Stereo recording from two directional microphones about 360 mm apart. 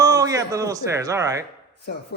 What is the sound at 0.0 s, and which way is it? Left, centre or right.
Speech, centre.